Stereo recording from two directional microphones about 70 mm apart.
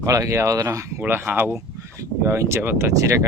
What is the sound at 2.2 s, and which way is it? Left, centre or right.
Speech, right.